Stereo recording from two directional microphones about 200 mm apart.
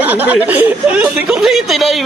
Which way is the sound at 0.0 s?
10° right (ahead or behind).